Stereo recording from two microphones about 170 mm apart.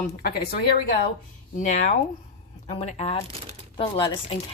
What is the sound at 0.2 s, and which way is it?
Speech, 65° left (ahead or behind).